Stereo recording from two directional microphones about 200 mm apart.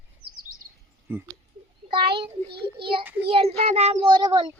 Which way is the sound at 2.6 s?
25° right (ahead or behind).